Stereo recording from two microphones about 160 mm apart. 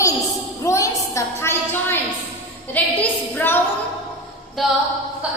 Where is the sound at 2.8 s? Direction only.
10° left (ahead or behind).